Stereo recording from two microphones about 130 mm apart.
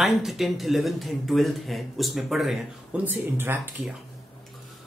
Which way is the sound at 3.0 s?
15° right (ahead or behind).